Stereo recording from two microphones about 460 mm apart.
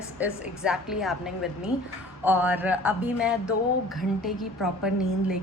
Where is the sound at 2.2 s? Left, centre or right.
Centre.